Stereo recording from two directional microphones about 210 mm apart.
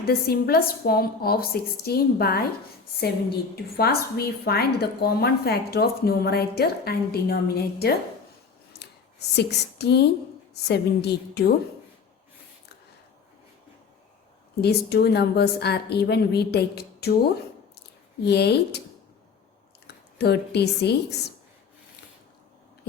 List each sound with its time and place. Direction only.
0.0 s a woman's voice: 45° left (ahead or behind)
8.8 s a sound: 50° left (ahead or behind)
10.5 s a woman's voice: 50° left (ahead or behind)
14.6 s a woman's voice: 50° left (ahead or behind)
17.7 s a sound: 50° left (ahead or behind)
20.1 s a woman's voice: 50° left (ahead or behind)